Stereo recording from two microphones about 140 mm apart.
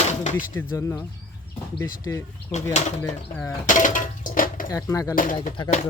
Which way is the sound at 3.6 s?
65° left (ahead or behind).